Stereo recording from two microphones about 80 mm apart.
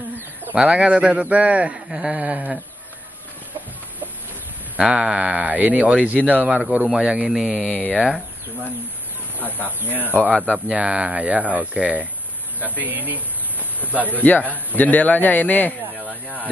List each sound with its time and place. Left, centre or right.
0.6 s speech: centre
4.7 s speech: centre
9.8 s a man's voice: left
10.7 s speech: centre
14.0 s a man's voice: left